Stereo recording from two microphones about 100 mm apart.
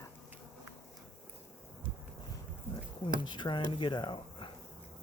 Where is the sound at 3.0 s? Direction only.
50° left (ahead or behind).